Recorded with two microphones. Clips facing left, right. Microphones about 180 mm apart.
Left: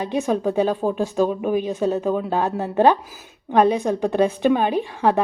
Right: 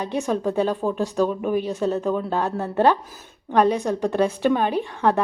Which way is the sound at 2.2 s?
15° left (ahead or behind).